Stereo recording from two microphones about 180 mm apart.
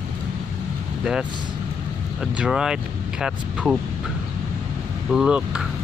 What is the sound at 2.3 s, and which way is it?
Speech, 5° right (ahead or behind).